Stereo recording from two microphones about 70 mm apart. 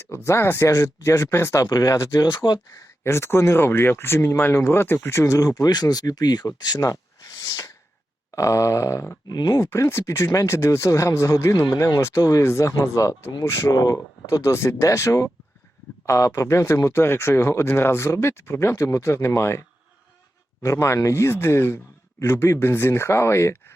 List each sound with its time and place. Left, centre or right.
0.1 s speech: left
1.6 s speech: left
2.1 s speech: left
3.0 s speech: left
5.2 s speech: left
6.7 s speech: left
9.2 s speech: left
9.6 s speech: left
13.7 s speech: left
14.4 s speech: left